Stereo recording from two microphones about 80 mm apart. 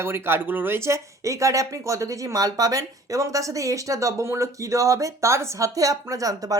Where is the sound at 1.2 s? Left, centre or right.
Right.